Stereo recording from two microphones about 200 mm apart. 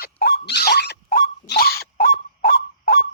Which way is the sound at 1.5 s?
50° left (ahead or behind).